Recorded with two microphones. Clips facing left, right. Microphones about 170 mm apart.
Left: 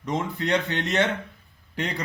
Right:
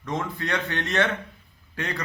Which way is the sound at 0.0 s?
20° left (ahead or behind).